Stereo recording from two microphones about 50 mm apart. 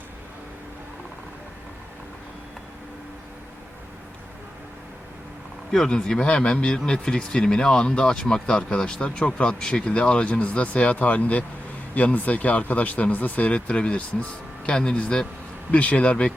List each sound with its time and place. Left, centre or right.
5.7 s speech: centre